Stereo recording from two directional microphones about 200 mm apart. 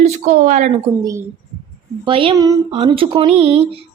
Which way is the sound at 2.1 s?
25° right (ahead or behind).